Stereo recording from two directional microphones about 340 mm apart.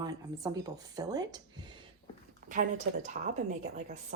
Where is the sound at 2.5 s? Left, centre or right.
Right.